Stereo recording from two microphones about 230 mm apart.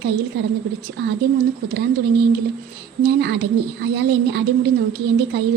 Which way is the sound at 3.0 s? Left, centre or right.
Right.